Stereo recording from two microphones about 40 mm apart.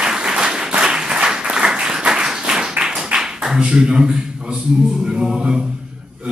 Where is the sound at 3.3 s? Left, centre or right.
Centre.